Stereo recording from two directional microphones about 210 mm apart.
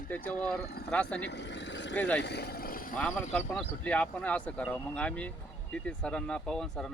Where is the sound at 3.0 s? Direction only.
5° left (ahead or behind).